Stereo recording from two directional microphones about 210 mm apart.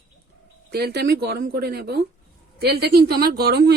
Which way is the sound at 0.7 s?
50° right (ahead or behind).